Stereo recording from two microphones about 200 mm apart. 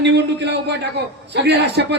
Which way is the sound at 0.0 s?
60° right (ahead or behind).